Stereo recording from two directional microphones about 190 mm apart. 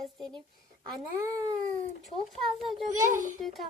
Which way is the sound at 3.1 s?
45° right (ahead or behind).